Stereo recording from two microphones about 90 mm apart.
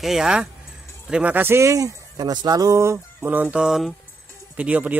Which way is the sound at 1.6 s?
40° right (ahead or behind).